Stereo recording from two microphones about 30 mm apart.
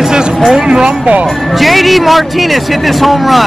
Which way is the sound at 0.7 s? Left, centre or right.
Right.